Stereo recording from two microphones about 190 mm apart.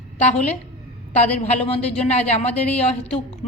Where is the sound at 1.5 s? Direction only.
35° left (ahead or behind).